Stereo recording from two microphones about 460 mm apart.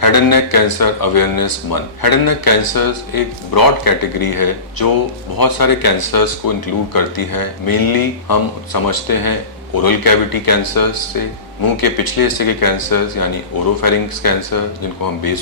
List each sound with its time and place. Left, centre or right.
0.0 s speech: left